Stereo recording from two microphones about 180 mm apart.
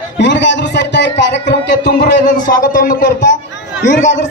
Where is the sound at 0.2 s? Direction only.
80° left.